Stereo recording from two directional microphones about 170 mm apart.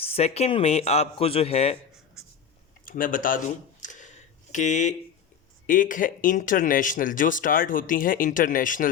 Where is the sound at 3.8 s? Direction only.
45° left (ahead or behind).